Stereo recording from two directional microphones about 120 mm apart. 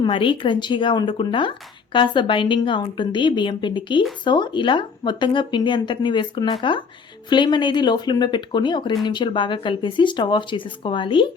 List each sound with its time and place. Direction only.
0.0 s speech: 45° left (ahead or behind)